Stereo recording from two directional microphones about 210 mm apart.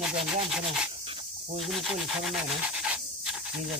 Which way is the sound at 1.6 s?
Centre (ahead or behind).